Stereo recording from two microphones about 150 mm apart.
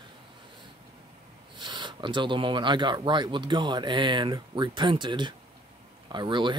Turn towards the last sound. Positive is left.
turn(degrees=-30)  # may be behind; listen again after turning